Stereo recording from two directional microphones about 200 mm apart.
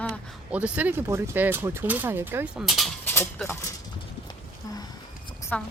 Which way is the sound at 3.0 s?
10° left (ahead or behind).